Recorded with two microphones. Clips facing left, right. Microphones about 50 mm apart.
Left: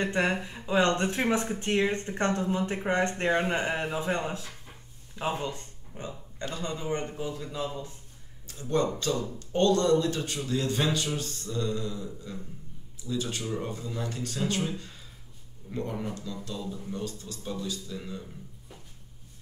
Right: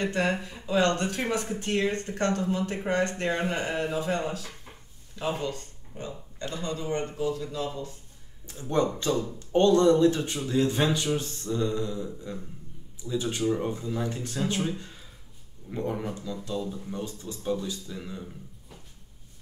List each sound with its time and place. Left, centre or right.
0.0 s speech: left
8.5 s speech: centre
11.1 s mantra: centre
13.9 s speech: right
15.7 s mantra: centre